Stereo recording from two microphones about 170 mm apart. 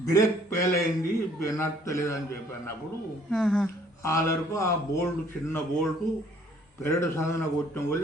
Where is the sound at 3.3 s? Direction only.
5° left (ahead or behind).